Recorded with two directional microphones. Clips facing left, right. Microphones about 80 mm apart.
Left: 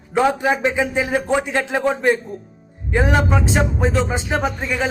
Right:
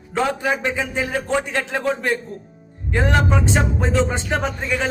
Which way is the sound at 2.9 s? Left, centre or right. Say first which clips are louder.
Left 1 dB; centre.